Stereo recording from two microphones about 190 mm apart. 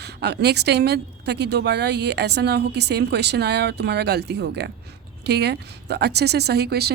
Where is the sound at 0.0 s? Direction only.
60° right (ahead or behind).